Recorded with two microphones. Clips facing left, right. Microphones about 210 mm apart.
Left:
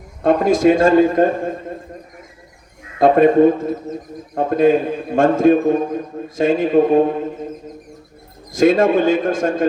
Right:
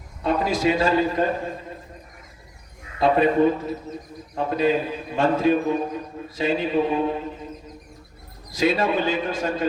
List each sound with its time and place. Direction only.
0.2 s a man's voice: 50° left (ahead or behind)
3.0 s a man's voice: 50° left (ahead or behind)
8.5 s a man's voice: 50° left (ahead or behind)